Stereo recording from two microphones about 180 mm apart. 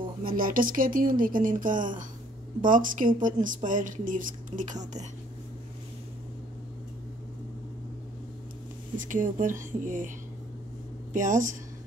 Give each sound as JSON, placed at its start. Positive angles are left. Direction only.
{"t": 0.2, "sound": "a woman's voice", "side_deg": -50}
{"t": 8.9, "sound": "a woman's voice", "side_deg": -45}
{"t": 11.1, "sound": "a woman's voice", "side_deg": -45}